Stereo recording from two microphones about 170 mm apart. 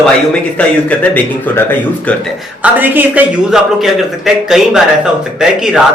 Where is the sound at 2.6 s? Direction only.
10° right (ahead or behind).